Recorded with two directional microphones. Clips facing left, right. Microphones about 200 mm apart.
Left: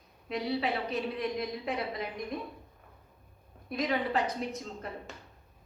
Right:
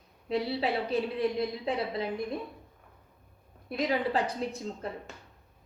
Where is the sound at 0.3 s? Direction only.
30° right (ahead or behind).